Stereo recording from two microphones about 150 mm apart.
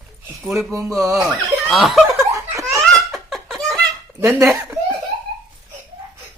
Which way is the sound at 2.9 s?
Centre (ahead or behind).